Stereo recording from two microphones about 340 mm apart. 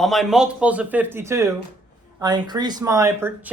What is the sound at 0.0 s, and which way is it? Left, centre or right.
Speech, centre.